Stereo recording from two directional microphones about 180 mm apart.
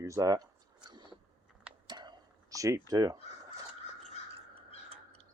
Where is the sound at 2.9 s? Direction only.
20° right (ahead or behind).